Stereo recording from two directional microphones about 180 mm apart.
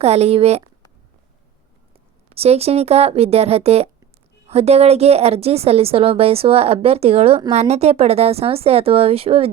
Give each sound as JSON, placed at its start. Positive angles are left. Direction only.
{"t": 0.0, "sound": "a woman's voice", "side_deg": -35}
{"t": 2.3, "sound": "a woman's voice", "side_deg": -35}